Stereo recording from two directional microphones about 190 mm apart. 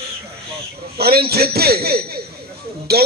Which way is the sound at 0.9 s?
55° right (ahead or behind).